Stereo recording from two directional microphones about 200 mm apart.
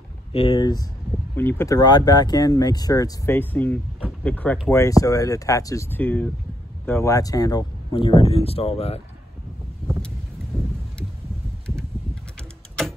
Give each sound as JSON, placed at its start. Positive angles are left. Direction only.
{"t": 0.3, "sound": "speech", "side_deg": 30}
{"t": 1.3, "sound": "speech", "side_deg": 10}
{"t": 10.5, "sound": "a sound", "side_deg": 5}